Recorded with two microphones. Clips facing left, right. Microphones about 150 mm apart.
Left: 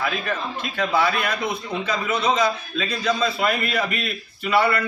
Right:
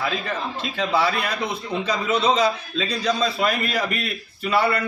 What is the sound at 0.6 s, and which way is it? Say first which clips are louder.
A man's voice: even; 30° right (ahead or behind).